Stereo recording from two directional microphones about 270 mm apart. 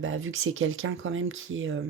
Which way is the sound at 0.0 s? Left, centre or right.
Right.